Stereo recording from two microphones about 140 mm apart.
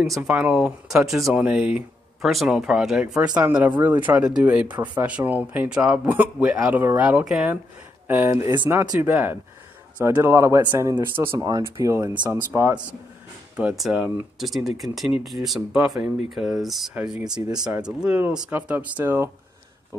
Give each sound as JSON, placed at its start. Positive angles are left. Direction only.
{"t": 0.0, "sound": "speech", "side_deg": 0}
{"t": 13.6, "sound": "speech", "side_deg": -5}
{"t": 17.3, "sound": "speech", "side_deg": -30}
{"t": 17.8, "sound": "speech", "side_deg": -10}